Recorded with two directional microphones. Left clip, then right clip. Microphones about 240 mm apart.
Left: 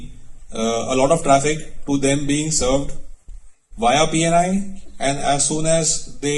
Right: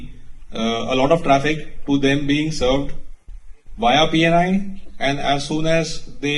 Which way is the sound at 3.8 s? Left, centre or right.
Left.